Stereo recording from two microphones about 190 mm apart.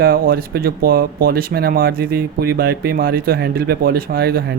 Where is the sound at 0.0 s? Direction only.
50° right (ahead or behind).